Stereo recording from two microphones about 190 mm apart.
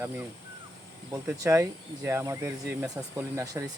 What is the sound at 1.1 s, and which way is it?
Speech, 15° right (ahead or behind).